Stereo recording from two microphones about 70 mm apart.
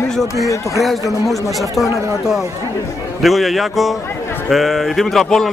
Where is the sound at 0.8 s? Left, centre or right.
Centre.